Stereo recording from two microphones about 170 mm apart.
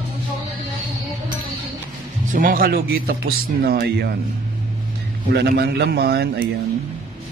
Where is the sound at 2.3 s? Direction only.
55° right (ahead or behind).